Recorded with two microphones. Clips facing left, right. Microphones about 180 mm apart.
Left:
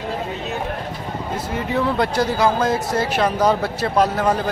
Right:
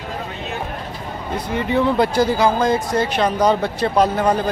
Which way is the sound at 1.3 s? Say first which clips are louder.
Right 4 dB; centre (ahead or behind).